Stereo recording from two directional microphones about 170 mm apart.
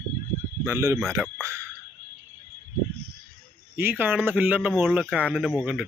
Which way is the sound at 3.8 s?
10° right (ahead or behind).